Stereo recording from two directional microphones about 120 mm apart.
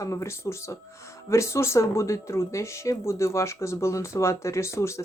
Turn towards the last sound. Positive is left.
turn(degrees=25)  # may be behind; listen again after turning